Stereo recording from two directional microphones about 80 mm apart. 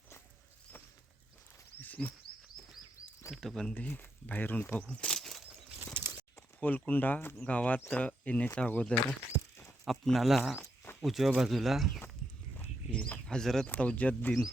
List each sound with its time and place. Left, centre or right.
1.8 s a sound: left
3.3 s speech: centre
3.8 s speech: left; by 5.4 s centre
5.5 s bird flight: right
6.6 s speech: left
9.8 s speech: centre
13.2 s speech: centre
13.7 s speech: centre